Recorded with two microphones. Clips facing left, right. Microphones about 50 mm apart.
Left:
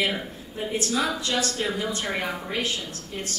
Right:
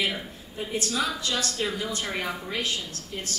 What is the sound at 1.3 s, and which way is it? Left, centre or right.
A woman's voice, left.